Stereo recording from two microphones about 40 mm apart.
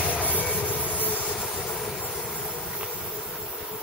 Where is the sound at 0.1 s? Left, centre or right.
Left.